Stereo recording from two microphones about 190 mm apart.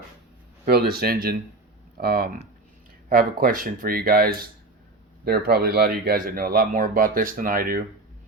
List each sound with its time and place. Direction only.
0.6 s speech: 55° right (ahead or behind)